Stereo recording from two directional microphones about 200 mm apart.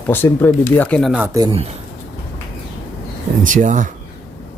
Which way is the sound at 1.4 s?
25° right (ahead or behind).